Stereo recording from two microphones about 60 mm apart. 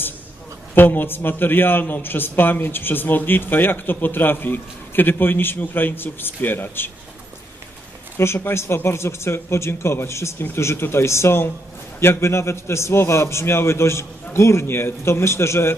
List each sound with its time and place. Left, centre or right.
0.8 s a man's voice: left
8.2 s speech: left